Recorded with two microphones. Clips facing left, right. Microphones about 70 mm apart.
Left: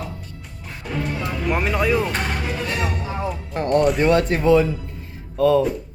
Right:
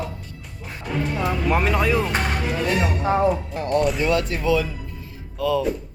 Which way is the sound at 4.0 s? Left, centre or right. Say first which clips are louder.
Left 4 dB; left.